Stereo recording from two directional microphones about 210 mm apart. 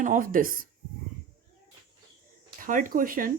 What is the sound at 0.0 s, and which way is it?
Speech, 40° right (ahead or behind).